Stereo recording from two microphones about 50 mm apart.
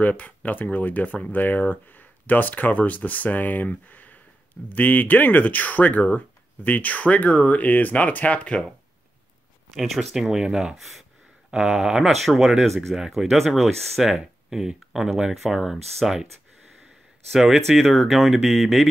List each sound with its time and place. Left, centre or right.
0.0 s speech: left
3.9 s a sound: left
4.6 s speech: left
10.1 s speech: centre
14.5 s speech: centre
17.3 s speech: centre